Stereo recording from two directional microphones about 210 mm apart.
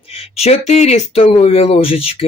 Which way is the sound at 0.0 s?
25° left (ahead or behind).